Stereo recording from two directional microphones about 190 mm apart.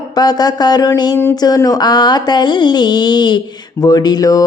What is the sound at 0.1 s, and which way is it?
Speech, 20° left (ahead or behind).